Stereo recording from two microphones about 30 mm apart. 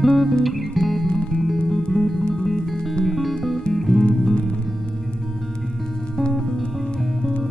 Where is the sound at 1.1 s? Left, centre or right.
Centre.